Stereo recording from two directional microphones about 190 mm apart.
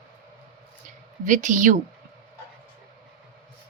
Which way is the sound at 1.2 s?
40° right (ahead or behind).